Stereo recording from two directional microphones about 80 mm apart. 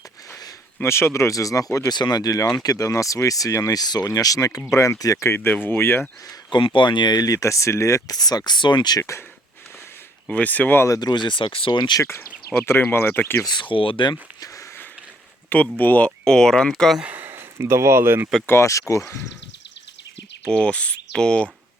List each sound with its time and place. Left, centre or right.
0.8 s speech: left
6.5 s speech: left
9.0 s speech: left
10.2 s speech: centre
10.8 s speech: left
11.1 s speech: left
12.0 s speech: left
13.4 s speech: left
15.4 s speech: centre
17.0 s speech: right
18.4 s speech: left
20.5 s speech: centre